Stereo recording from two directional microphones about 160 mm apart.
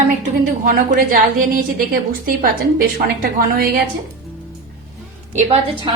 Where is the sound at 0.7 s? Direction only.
60° right (ahead or behind).